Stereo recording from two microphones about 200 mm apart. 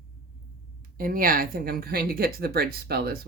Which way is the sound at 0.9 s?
45° right (ahead or behind).